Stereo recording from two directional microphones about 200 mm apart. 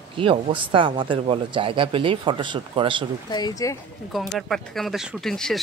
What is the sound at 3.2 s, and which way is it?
Speech, 20° left (ahead or behind).